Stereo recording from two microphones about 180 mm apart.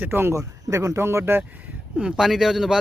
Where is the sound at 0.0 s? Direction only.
10° right (ahead or behind).